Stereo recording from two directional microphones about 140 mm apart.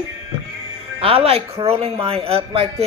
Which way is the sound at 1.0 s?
45° right (ahead or behind).